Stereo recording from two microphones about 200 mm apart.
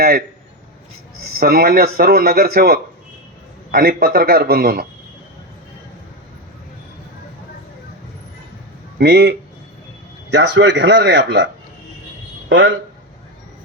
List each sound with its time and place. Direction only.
1.4 s speech: 50° right (ahead or behind)
9.0 s speech: 55° right (ahead or behind)
10.3 s speech: 60° right (ahead or behind)
12.5 s speech: 65° right (ahead or behind)